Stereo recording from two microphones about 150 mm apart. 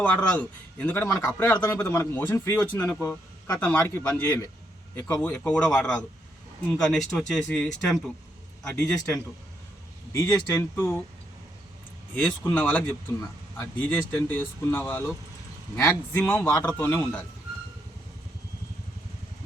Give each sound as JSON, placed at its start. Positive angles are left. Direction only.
{"t": 0.0, "sound": "a man's voice", "side_deg": 10}
{"t": 12.1, "sound": "speech", "side_deg": 10}